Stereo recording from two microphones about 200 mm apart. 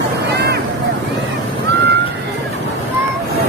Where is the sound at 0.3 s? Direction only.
55° right (ahead or behind).